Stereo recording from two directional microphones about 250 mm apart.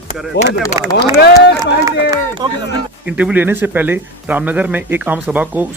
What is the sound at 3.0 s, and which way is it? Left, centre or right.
Speech, centre.